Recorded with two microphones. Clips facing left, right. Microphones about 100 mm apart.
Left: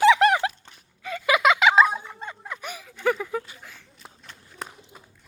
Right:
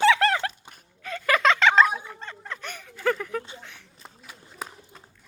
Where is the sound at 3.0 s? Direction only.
10° left (ahead or behind).